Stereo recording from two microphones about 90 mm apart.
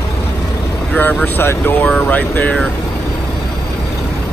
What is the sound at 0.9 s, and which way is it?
Speech, 20° left (ahead or behind).